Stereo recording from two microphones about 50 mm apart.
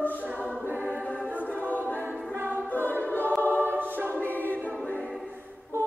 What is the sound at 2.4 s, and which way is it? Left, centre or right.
Music, right.